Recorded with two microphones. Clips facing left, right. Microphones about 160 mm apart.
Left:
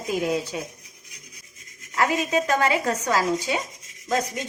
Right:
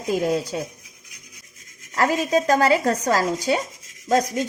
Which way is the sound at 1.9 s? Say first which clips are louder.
Right 3 dB; 35° right (ahead or behind).